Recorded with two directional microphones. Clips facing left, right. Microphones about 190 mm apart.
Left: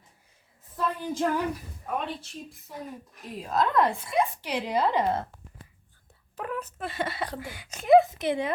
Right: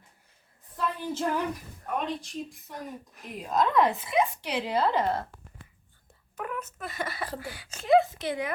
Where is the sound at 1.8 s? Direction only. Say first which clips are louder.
Right 1 dB; 5° left (ahead or behind).